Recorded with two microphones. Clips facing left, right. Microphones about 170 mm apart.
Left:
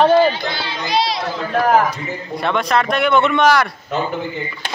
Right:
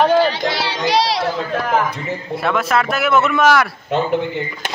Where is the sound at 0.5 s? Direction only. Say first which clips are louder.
Right 4 dB; 90° right.